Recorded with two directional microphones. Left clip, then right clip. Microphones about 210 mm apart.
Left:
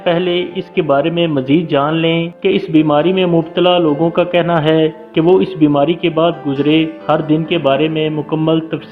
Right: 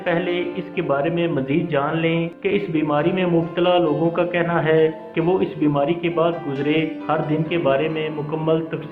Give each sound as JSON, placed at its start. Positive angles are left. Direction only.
{"t": 0.0, "sound": "speech", "side_deg": 50}